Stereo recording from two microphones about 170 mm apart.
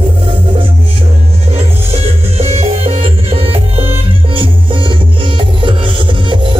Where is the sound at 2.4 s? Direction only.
35° right (ahead or behind).